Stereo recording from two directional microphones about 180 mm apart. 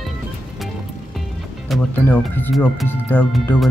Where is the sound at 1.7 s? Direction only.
10° left (ahead or behind).